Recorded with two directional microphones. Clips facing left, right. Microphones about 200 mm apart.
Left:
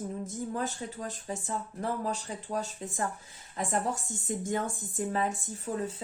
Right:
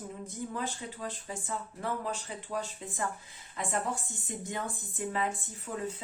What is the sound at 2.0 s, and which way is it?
Speech, 40° left (ahead or behind).